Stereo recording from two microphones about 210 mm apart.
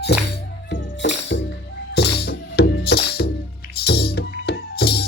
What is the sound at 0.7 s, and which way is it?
Music, 55° left (ahead or behind).